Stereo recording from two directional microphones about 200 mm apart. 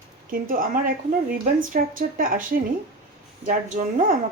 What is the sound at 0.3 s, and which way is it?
A woman's voice, 45° right (ahead or behind).